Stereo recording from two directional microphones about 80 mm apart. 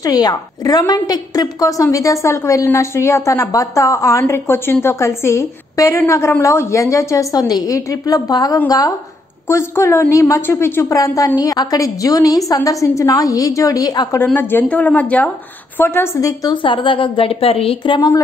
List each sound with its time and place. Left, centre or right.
0.0 s a woman's voice: left
9.5 s a woman's voice: left
10.4 s a woman's voice: left
11.0 s a woman's voice: left
14.1 s speech: left
15.8 s a woman's voice: left
16.2 s a woman's voice: left
16.6 s a woman's voice: left